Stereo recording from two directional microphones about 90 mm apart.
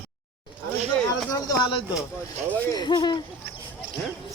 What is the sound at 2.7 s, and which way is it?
Speech, 55° left (ahead or behind).